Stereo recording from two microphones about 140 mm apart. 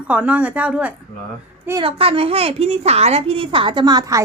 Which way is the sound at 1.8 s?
40° right (ahead or behind).